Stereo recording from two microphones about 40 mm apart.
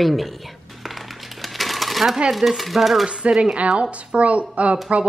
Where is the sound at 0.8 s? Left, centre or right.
Centre.